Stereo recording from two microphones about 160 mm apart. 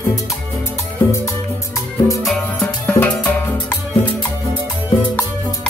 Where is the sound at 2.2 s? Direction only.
5° left (ahead or behind).